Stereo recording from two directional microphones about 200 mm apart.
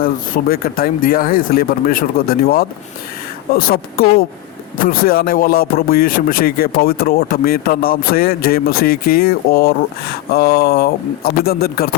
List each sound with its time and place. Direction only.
0.0 s speech: 50° left (ahead or behind)